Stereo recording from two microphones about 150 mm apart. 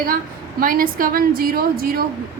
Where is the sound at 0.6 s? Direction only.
70° right (ahead or behind).